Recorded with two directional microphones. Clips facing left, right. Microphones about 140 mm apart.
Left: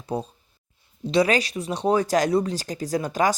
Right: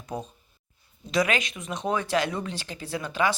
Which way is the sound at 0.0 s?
30° left (ahead or behind).